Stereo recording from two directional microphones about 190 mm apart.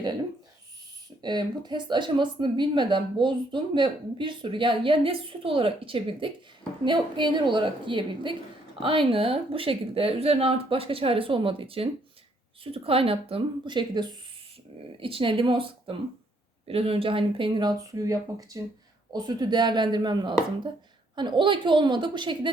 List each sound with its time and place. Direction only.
1.2 s speech: 20° right (ahead or behind)